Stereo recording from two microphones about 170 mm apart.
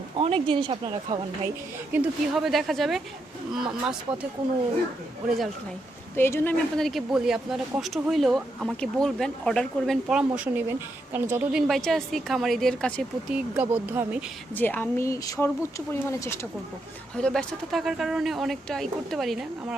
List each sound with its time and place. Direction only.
0.2 s speech: 35° right (ahead or behind)
1.9 s speech: 5° right (ahead or behind)
6.1 s speech: 15° left (ahead or behind); by 11.6 s 15° right (ahead or behind)
11.7 s speech: centre (ahead or behind)
13.6 s speech: 10° right (ahead or behind)
14.5 s speech: 10° left (ahead or behind)
17.2 s speech: 5° left (ahead or behind)